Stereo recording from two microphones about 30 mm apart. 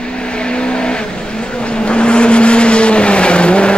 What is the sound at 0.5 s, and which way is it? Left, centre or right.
Vehicle, left.